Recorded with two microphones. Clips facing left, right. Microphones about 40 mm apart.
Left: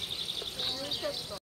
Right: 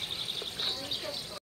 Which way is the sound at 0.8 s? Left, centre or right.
Left.